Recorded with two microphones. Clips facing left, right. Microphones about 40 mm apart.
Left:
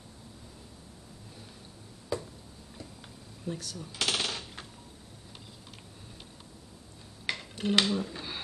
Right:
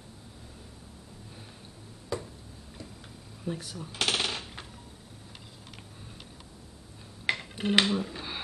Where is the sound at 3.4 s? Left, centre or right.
Centre.